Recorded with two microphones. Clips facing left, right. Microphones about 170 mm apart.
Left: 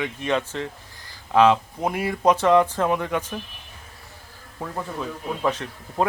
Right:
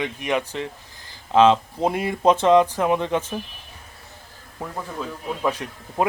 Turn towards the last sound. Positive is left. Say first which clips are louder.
# right 1 dB
turn(degrees=-10)  # may be behind; listen again after turning